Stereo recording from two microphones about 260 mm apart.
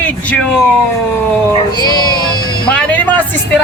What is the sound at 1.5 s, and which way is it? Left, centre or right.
Speech, centre.